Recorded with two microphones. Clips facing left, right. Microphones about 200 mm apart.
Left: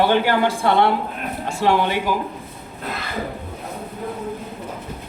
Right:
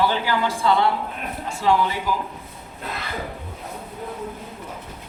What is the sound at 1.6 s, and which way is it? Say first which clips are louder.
Speech: left 2 dB; 75° left (ahead or behind).